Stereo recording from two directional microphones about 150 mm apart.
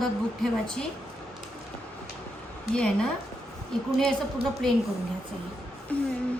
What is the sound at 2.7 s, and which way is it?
Speech, 5° left (ahead or behind).